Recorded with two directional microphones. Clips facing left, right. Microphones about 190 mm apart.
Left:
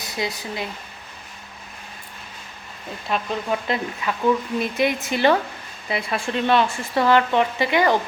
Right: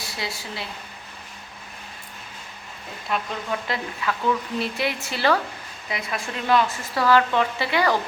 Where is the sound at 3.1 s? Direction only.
20° left (ahead or behind).